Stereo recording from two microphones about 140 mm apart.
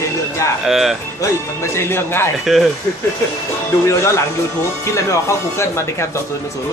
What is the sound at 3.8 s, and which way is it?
Speech, 20° left (ahead or behind).